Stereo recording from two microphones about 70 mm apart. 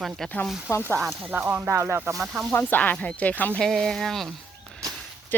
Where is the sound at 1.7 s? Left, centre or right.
Right.